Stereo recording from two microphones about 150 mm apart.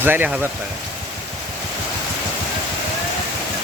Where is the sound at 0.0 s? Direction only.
10° right (ahead or behind).